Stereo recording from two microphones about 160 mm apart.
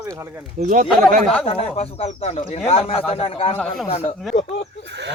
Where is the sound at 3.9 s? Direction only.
40° left (ahead or behind).